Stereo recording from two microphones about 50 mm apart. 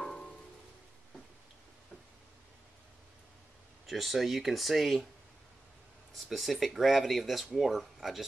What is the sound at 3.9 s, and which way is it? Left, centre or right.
Speech, centre.